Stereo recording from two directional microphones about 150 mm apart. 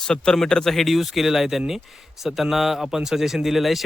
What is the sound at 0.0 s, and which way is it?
A man's voice, 5° left (ahead or behind).